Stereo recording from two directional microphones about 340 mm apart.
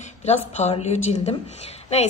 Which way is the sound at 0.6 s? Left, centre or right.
Centre.